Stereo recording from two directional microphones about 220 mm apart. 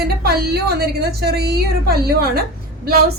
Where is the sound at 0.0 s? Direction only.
45° right (ahead or behind).